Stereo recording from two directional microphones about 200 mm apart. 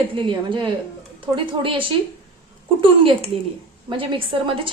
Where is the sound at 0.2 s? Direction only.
25° right (ahead or behind).